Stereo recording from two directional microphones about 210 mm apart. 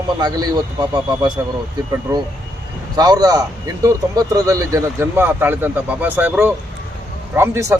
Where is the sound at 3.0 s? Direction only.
20° right (ahead or behind).